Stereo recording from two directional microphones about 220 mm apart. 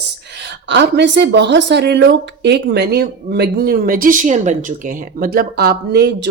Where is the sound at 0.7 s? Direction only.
55° right (ahead or behind).